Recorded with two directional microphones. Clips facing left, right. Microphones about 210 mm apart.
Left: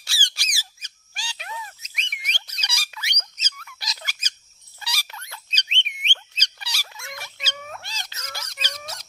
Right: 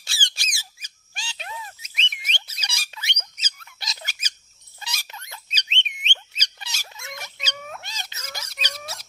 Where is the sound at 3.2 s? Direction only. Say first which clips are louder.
Right 1 dB; 10° right (ahead or behind).